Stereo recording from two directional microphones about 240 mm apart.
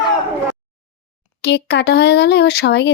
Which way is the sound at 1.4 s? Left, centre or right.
Left.